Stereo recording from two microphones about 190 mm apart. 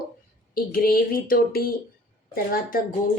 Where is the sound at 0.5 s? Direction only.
50° left (ahead or behind).